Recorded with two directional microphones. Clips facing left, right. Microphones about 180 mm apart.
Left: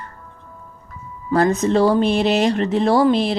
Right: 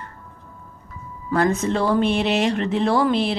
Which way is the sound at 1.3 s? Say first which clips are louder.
Left 4 dB; 35° left (ahead or behind).